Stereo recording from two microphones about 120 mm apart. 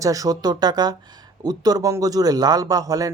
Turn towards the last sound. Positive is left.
turn(degrees=-30)  # may be behind; listen again after turning